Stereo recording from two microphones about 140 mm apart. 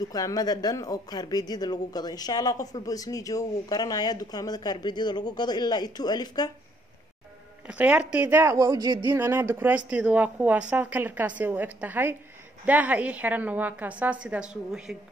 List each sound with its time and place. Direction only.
0.1 s speech: 25° left (ahead or behind)
7.6 s speech: 10° right (ahead or behind); by 9.0 s 30° right (ahead or behind)
9.0 s a woman's voice: 15° right (ahead or behind)